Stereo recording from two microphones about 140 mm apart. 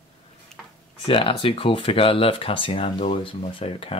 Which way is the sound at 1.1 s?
40° left (ahead or behind).